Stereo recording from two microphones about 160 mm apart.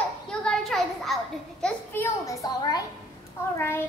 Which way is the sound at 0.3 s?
5° left (ahead or behind).